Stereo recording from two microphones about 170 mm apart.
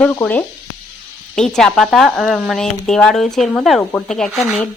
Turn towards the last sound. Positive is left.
turn(degrees=0)  # may be behind; listen again after turning